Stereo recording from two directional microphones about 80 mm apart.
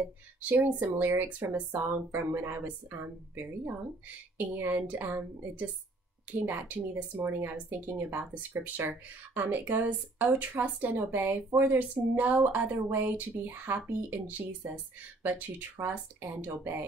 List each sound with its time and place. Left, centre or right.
0.4 s speech: right